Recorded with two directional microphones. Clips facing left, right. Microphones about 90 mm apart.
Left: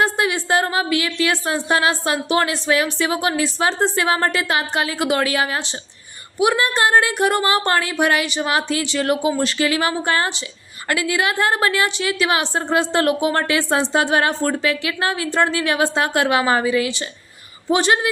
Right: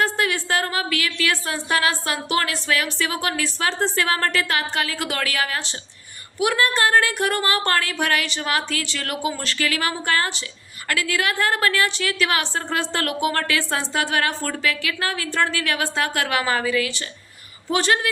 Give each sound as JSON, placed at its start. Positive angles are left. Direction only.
{"t": 0.0, "sound": "a woman's voice", "side_deg": 15}